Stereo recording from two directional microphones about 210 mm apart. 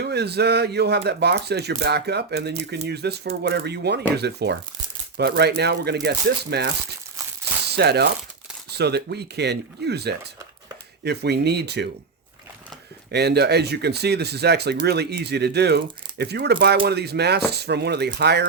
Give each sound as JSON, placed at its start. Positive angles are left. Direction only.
{"t": 0.0, "sound": "speech", "side_deg": -50}
{"t": 7.8, "sound": "speech", "side_deg": -50}
{"t": 13.1, "sound": "speech", "side_deg": -50}